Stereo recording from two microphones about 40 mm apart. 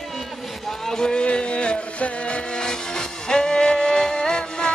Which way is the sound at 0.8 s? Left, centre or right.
Centre.